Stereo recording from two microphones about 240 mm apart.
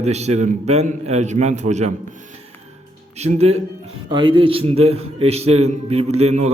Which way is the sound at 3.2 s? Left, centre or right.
Right.